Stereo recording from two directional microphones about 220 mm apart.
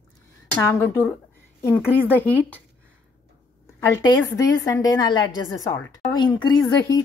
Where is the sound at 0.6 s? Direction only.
10° left (ahead or behind).